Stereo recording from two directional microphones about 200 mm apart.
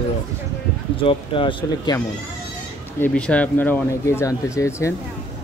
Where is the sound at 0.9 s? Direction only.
25° left (ahead or behind).